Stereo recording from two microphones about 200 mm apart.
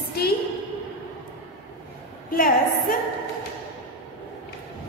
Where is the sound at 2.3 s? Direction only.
45° left (ahead or behind).